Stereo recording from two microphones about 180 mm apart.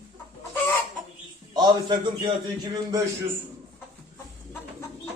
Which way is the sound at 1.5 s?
20° right (ahead or behind).